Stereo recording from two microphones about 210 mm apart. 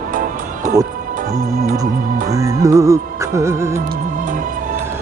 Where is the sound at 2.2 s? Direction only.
15° right (ahead or behind).